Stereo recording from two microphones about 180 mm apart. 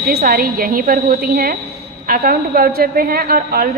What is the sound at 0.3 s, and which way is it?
A woman's voice, 55° right (ahead or behind).